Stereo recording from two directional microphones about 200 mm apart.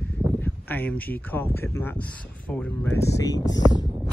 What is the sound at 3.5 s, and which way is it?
Speech, 65° left (ahead or behind).